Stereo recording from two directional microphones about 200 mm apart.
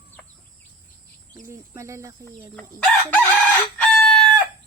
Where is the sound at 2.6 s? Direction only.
5° left (ahead or behind).